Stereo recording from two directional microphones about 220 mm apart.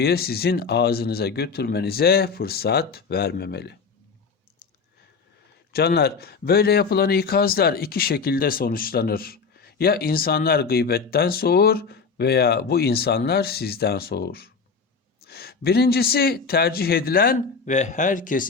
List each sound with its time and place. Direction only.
0.0 s speech: 45° left (ahead or behind)
5.7 s speech: 45° left (ahead or behind)